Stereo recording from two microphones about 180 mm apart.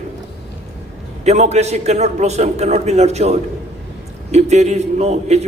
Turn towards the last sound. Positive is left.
turn(degrees=-35)  # may be behind; listen again after turning